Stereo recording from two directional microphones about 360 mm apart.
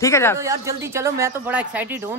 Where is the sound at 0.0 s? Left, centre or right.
Centre.